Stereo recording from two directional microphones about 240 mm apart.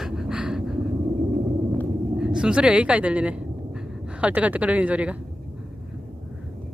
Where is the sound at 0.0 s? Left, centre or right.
Centre.